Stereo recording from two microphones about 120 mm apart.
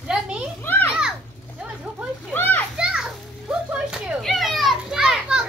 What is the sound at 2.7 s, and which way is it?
Children playing, 5° right (ahead or behind).